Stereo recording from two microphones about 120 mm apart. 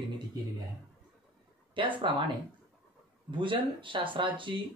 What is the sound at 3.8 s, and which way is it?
Speech, 45° right (ahead or behind).